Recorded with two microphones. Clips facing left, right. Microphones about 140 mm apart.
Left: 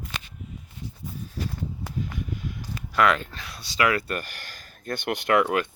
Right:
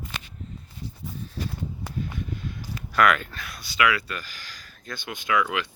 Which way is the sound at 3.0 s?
30° left (ahead or behind).